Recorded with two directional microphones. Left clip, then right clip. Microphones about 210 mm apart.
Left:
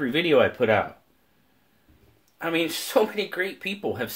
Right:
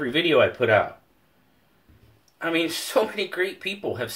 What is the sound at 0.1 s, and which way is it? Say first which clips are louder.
Speech: right 1 dB; 45° left (ahead or behind).